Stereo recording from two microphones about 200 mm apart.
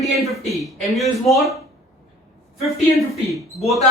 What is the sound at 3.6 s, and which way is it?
Speech, 30° left (ahead or behind).